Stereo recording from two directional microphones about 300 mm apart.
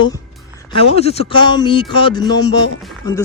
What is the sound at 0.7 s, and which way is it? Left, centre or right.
Speech, centre.